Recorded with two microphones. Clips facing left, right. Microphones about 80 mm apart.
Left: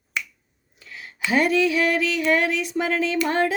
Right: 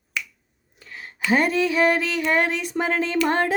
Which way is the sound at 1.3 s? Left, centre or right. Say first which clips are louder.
Left 1 dB; right.